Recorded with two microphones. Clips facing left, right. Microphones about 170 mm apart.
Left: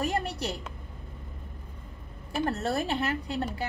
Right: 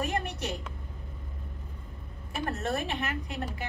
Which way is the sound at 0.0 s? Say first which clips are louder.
Left 2 dB; 35° left (ahead or behind).